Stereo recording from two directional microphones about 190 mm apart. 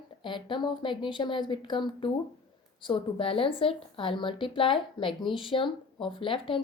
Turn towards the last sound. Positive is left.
turn(degrees=25)  # may be behind; listen again after turning